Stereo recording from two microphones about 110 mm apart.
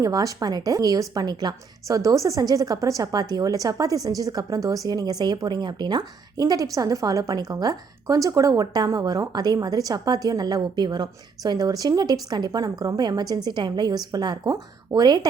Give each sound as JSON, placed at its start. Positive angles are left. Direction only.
{"t": 0.0, "sound": "a woman's voice", "side_deg": -35}